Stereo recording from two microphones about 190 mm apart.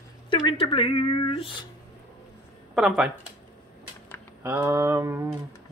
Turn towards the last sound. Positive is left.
turn(degrees=-15)  # may be behind; listen again after turning